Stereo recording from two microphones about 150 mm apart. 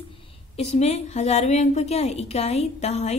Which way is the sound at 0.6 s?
45° left (ahead or behind).